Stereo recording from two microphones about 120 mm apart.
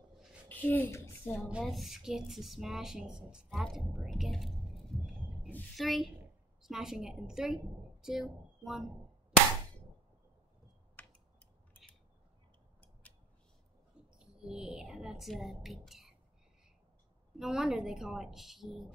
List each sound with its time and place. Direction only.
0.5 s a woman's voice: 15° left (ahead or behind)
1.5 s a woman's voice: 5° right (ahead or behind)
3.6 s a sound: centre (ahead or behind)
5.8 s a woman's voice: centre (ahead or behind)
11.0 s a sound: 15° left (ahead or behind)
13.0 s scissors: 10° left (ahead or behind)
14.1 s a woman's voice: 5° right (ahead or behind)
17.4 s a woman's voice: 5° right (ahead or behind)